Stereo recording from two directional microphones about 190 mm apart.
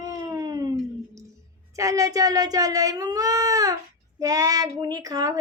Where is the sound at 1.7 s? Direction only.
15° right (ahead or behind).